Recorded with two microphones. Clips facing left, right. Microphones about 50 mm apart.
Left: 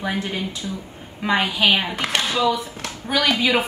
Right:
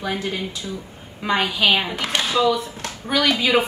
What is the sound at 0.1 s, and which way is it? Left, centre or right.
A woman's voice, left.